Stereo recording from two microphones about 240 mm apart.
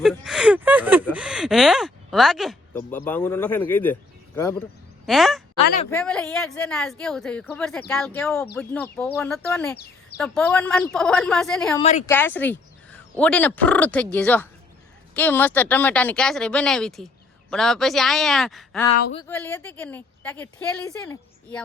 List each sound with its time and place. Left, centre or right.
0.0 s speech: centre
5.0 s speech: centre
11.8 s speech: left
12.0 s speech: centre